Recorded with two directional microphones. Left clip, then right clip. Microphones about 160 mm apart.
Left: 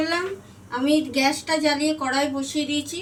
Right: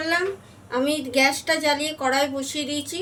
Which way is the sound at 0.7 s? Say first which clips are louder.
Left 1 dB; 75° right (ahead or behind).